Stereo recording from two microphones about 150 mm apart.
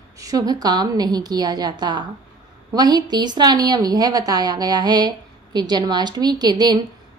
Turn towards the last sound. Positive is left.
turn(degrees=-30)  # may be behind; listen again after turning